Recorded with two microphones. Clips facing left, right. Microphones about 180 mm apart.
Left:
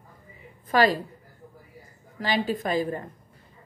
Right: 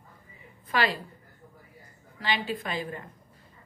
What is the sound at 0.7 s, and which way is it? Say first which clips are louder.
Speech: left 7 dB; 40° left (ahead or behind).